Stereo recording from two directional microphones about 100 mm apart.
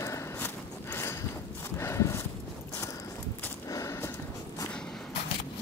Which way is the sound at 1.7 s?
30° left (ahead or behind).